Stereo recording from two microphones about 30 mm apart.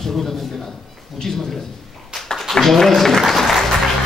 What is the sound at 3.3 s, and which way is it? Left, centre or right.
Applause, centre.